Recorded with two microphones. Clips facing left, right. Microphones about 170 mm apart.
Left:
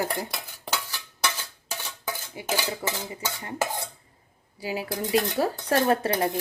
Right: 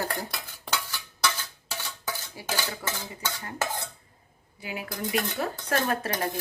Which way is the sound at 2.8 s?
25° left (ahead or behind).